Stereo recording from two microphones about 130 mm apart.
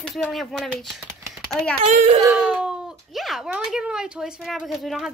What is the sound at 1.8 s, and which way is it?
Speech, 60° right (ahead or behind).